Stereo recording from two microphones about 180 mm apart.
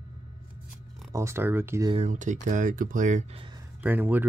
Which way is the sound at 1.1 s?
15° right (ahead or behind).